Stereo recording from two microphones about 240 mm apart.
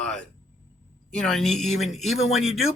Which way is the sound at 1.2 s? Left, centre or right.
Centre.